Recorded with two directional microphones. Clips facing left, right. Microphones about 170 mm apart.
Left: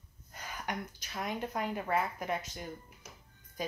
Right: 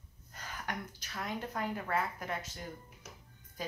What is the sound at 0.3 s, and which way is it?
Speech, 15° left (ahead or behind).